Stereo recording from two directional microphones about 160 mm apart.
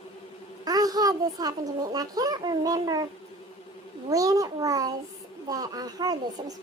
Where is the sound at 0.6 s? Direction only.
25° right (ahead or behind).